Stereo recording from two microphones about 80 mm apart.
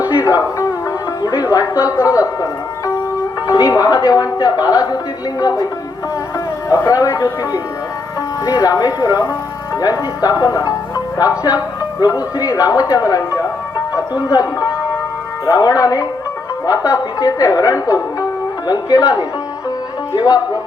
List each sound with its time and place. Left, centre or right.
0.3 s music: left
1.8 s speech: left
6.7 s speech: left